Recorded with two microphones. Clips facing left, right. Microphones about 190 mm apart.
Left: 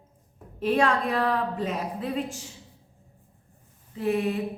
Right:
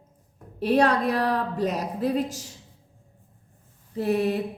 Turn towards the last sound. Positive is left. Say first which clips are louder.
# right 2 dB
turn(degrees=-40)  # may be behind; listen again after turning